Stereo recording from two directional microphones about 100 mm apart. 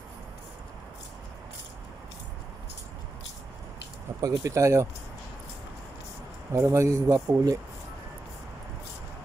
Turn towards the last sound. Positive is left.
turn(degrees=-35)  # may be behind; listen again after turning